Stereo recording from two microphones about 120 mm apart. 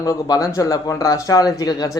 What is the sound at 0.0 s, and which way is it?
Speech, 30° left (ahead or behind).